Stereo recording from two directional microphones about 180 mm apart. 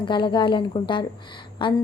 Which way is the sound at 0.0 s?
25° left (ahead or behind).